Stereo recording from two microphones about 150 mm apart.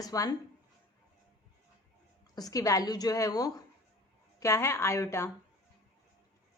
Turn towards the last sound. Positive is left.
turn(degrees=20)  # may be behind; listen again after turning